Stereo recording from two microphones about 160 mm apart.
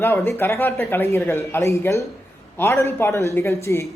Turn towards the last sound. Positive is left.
turn(degrees=15)  # may be behind; listen again after turning